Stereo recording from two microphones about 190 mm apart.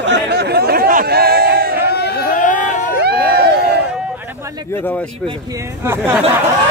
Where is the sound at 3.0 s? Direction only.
55° right (ahead or behind).